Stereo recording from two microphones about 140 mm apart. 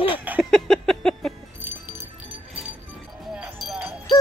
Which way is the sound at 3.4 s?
5° right (ahead or behind).